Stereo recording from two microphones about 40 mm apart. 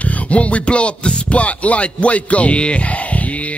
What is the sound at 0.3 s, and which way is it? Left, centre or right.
Music, left.